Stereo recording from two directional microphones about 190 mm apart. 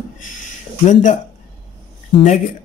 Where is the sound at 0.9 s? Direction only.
40° left (ahead or behind).